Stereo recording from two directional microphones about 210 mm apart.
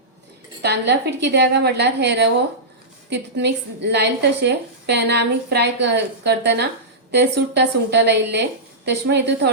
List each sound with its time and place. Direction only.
0.6 s a woman's voice: 55° right (ahead or behind)